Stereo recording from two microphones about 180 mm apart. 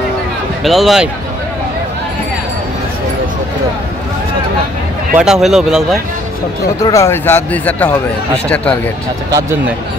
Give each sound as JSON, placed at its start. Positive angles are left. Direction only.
{"t": 0.7, "sound": "speech", "side_deg": 0}
{"t": 5.1, "sound": "speech", "side_deg": -5}
{"t": 6.8, "sound": "speech", "side_deg": 15}